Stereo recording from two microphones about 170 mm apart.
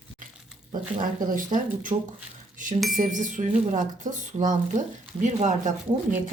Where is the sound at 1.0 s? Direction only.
50° right (ahead or behind).